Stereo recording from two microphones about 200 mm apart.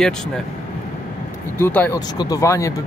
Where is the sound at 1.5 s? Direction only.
10° left (ahead or behind).